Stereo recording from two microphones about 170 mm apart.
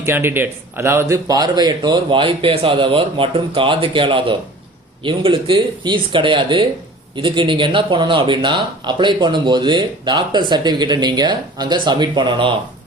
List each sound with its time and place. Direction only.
0.0 s speech: 15° right (ahead or behind); by 12.5 s 30° right (ahead or behind)